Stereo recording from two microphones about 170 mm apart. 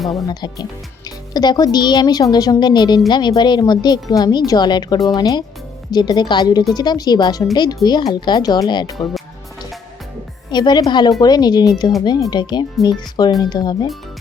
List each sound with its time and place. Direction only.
0.0 s speech: centre (ahead or behind)
0.3 s speech: 25° left (ahead or behind)
10.5 s speech: 25° left (ahead or behind)